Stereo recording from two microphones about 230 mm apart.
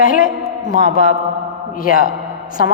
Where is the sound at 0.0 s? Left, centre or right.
Left.